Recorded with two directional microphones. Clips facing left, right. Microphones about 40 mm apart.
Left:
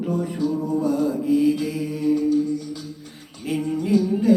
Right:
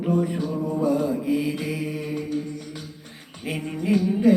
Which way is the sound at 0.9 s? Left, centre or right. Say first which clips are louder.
Left 3 dB; right.